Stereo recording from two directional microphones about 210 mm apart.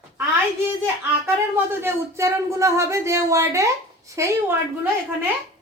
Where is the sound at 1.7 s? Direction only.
10° right (ahead or behind).